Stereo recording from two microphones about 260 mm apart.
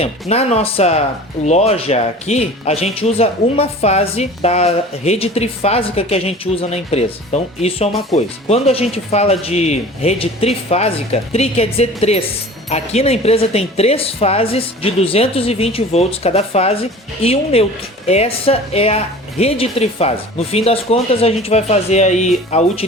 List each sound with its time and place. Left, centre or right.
0.0 s speech: left